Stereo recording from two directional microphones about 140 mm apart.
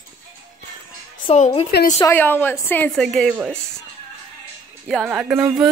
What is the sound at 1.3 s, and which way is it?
Speech, 45° left (ahead or behind).